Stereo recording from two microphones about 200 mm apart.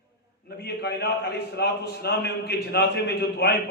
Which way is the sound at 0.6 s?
55° left (ahead or behind).